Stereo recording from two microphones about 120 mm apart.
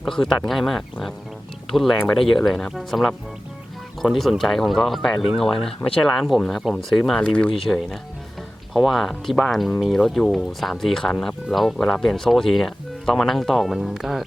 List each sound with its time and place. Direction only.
0.0 s speech: 5° left (ahead or behind)